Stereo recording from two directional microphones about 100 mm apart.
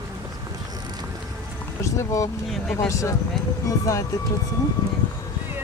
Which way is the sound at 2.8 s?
30° left (ahead or behind).